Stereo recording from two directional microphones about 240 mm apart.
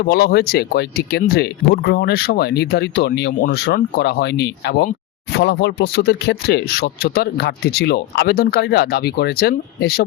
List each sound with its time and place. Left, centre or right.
0.0 s speech: left